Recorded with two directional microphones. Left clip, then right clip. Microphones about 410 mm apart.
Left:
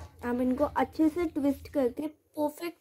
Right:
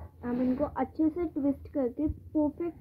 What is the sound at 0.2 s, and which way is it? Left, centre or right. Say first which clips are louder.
A woman's voice: left 2 dB; centre.